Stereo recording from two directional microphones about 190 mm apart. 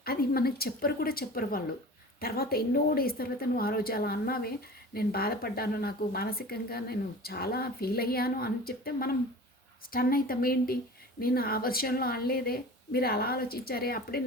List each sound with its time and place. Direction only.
0.0 s speech: 55° left (ahead or behind)